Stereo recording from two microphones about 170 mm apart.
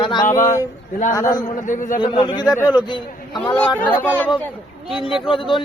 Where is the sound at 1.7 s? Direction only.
50° left (ahead or behind).